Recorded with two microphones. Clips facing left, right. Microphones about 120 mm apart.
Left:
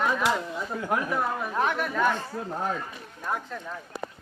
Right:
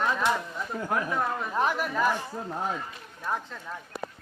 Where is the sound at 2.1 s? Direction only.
15° right (ahead or behind).